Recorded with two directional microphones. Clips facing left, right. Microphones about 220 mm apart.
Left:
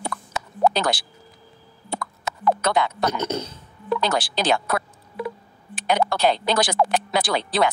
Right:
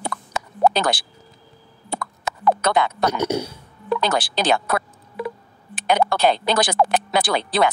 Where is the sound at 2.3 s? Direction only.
55° right (ahead or behind).